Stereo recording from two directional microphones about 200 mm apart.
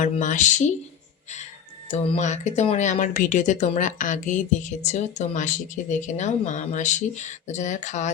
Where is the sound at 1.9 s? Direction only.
35° left (ahead or behind).